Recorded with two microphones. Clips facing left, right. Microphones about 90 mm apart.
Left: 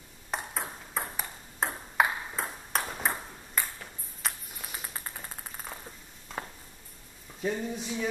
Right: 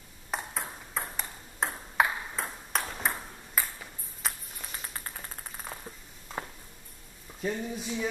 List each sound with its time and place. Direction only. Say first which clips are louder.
0.3 s ping: even; centre (ahead or behind)
7.4 s speech: left 1 dB; centre (ahead or behind)